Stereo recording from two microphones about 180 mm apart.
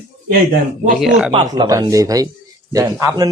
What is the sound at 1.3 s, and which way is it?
Speech, 25° right (ahead or behind).